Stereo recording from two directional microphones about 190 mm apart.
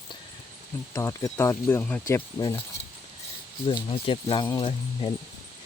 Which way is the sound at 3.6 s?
25° left (ahead or behind).